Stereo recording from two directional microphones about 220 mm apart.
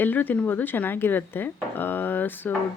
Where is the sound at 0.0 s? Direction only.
10° left (ahead or behind).